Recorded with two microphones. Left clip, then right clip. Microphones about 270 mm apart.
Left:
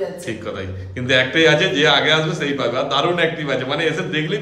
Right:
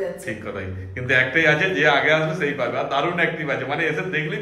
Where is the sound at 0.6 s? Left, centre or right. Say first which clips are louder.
Left 2 dB; centre.